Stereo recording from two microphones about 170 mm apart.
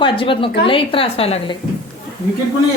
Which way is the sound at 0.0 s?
30° left (ahead or behind).